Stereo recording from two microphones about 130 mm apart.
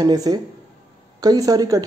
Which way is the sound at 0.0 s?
30° right (ahead or behind).